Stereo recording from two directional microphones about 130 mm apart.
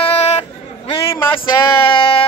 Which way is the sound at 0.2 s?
55° left (ahead or behind).